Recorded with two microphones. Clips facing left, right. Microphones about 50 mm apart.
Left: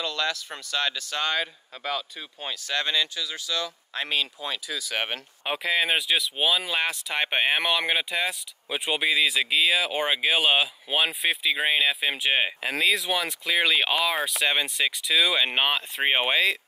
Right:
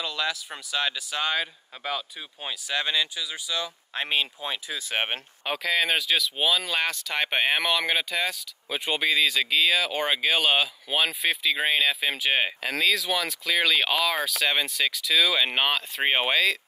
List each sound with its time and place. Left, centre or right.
0.0 s speech: centre
3.9 s speech: right
5.4 s speech: centre